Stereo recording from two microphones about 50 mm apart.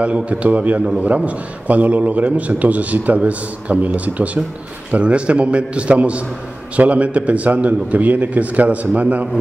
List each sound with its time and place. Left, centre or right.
0.0 s a man's voice: right